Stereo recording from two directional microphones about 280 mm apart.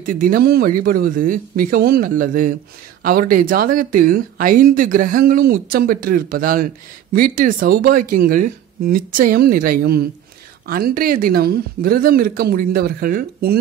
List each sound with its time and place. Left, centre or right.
0.0 s speech: right